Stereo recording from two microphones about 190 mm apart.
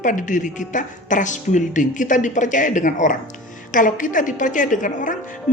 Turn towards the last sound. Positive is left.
turn(degrees=40)  # may be behind; listen again after turning